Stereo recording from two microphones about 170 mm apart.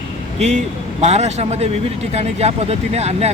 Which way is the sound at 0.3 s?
40° right (ahead or behind).